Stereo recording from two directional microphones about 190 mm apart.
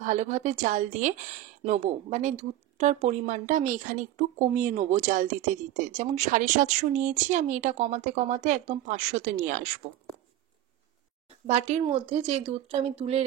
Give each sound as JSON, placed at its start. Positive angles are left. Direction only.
{"t": 0.0, "sound": "speech", "side_deg": -40}
{"t": 11.4, "sound": "speech", "side_deg": -35}